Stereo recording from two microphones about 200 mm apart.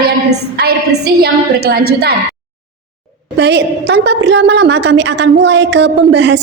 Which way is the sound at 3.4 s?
55° right (ahead or behind).